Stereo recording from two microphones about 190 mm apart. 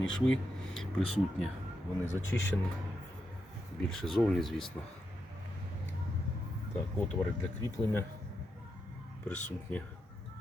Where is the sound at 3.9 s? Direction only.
5° left (ahead or behind).